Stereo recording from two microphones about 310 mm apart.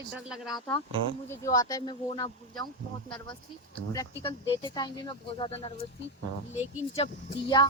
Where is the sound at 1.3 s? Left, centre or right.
Centre.